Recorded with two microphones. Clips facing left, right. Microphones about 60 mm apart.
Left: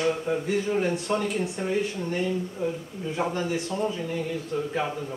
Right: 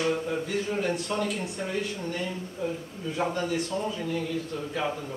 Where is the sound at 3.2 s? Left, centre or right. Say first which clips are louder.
Even; left.